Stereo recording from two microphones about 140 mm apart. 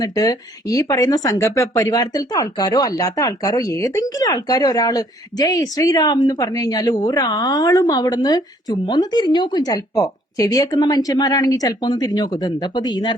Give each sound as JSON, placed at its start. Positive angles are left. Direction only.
{"t": 0.0, "sound": "speech", "side_deg": 25}